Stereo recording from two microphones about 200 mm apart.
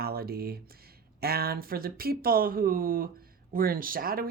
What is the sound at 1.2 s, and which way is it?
Speech, 50° right (ahead or behind).